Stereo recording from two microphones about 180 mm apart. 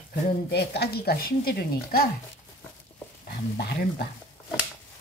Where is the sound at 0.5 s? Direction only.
65° left (ahead or behind).